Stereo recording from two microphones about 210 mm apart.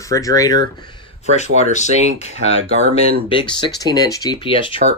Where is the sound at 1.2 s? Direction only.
30° left (ahead or behind).